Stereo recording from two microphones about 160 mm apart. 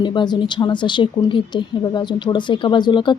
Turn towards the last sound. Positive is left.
turn(degrees=30)  # may be behind; listen again after turning